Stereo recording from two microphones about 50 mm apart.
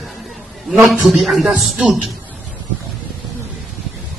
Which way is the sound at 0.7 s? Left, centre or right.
Centre.